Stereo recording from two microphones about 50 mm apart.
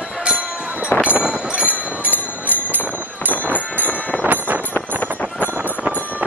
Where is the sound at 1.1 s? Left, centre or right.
Right.